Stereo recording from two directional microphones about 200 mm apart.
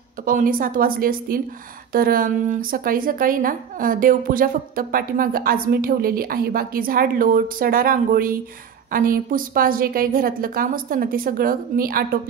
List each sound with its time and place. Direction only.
0.2 s a woman's voice: 45° right (ahead or behind)